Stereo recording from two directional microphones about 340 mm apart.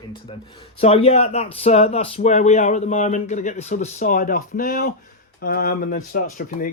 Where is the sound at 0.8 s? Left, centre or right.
Centre.